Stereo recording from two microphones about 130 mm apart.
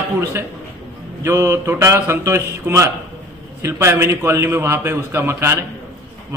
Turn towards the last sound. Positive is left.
turn(degrees=-20)  # may be behind; listen again after turning